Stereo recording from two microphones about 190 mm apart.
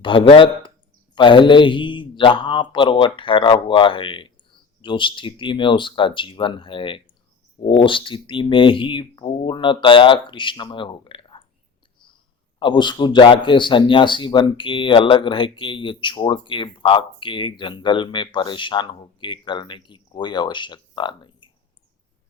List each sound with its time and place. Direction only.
0.0 s a man's voice: 25° left (ahead or behind)
12.5 s a man's voice: 25° left (ahead or behind)